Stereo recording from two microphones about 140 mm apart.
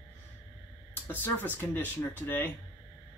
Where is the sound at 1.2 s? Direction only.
15° left (ahead or behind).